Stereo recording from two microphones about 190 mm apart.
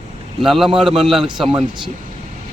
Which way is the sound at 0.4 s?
Centre (ahead or behind).